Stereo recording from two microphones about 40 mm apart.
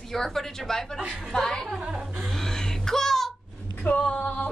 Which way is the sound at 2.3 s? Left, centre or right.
Centre.